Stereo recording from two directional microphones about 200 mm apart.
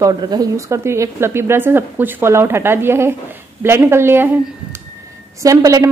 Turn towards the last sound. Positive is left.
turn(degrees=-15)  # may be behind; listen again after turning